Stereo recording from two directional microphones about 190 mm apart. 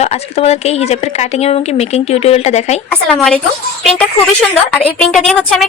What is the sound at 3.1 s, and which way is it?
A woman's voice, 5° left (ahead or behind).